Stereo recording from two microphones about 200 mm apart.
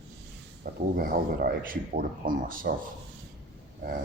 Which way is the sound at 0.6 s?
45° right (ahead or behind).